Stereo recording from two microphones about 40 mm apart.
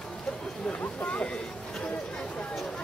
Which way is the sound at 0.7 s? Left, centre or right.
Left.